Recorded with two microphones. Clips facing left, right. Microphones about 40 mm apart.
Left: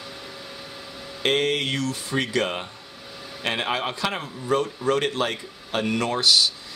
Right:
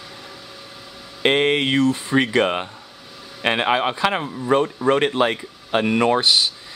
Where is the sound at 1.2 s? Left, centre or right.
Right.